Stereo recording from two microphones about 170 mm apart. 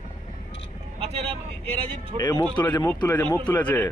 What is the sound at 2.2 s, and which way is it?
Speech, 25° left (ahead or behind).